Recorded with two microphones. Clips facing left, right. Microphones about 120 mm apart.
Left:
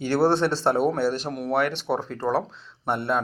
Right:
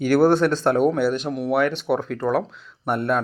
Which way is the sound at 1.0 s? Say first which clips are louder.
Right 3 dB; 35° left (ahead or behind).